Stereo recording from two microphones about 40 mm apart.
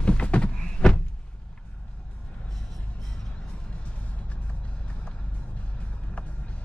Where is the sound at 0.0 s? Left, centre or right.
Left.